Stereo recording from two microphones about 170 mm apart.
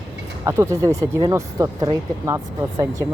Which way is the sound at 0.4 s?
15° right (ahead or behind).